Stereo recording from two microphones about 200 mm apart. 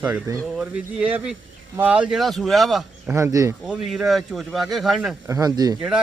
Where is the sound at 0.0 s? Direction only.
5° right (ahead or behind).